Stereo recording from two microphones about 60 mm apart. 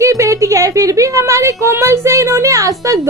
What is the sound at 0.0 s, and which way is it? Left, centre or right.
A woman's voice, right.